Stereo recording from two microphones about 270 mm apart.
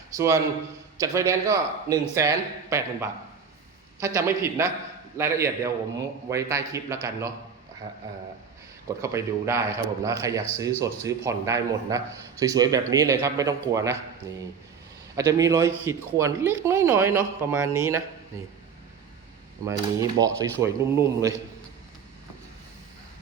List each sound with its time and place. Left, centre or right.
0.1 s a man's voice: centre
8.9 s speech: centre
19.6 s speech: centre